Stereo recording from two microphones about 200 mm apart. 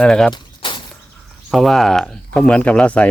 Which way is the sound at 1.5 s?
Centre (ahead or behind).